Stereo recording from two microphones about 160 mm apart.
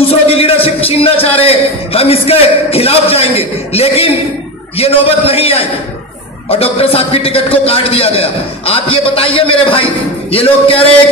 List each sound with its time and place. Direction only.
0.0 s a man's voice: 35° left (ahead or behind)